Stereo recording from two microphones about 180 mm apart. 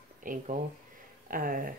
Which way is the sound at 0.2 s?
50° right (ahead or behind).